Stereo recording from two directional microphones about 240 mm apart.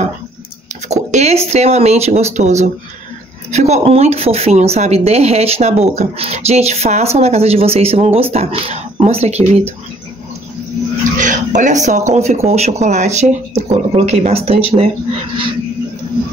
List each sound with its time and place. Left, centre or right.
1.1 s a sound: right
1.5 s a woman's voice: right
11.1 s a woman's voice: right